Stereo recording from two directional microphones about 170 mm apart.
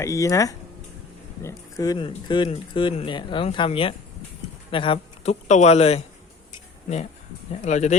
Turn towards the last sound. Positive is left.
turn(degrees=45)  # may be behind; listen again after turning